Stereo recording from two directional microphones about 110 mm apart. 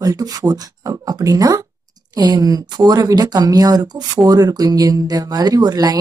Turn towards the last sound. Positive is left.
turn(degrees=-35)  # may be behind; listen again after turning